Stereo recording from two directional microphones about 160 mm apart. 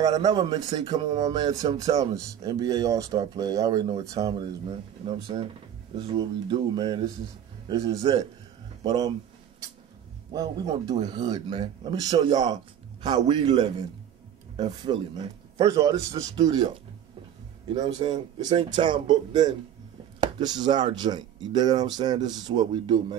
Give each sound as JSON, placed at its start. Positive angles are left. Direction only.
{"t": 0.0, "sound": "speech", "side_deg": -25}
{"t": 1.0, "sound": "a sound", "side_deg": -45}
{"t": 1.3, "sound": "speech", "side_deg": -25}
{"t": 10.3, "sound": "speech", "side_deg": -25}
{"t": 14.9, "sound": "speech", "side_deg": -35}
{"t": 15.5, "sound": "speech", "side_deg": -20}